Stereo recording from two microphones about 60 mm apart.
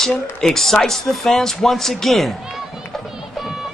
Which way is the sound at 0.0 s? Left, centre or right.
Centre.